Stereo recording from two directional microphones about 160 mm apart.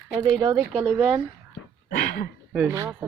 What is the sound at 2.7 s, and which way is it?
Speech, 15° right (ahead or behind).